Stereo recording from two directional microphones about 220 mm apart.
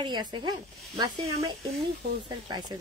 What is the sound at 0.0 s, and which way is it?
A woman's voice, 20° right (ahead or behind).